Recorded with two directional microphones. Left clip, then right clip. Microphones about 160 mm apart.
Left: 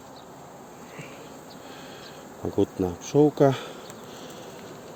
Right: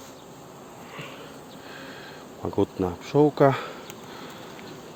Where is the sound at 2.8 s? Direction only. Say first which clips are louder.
Even; 20° left (ahead or behind).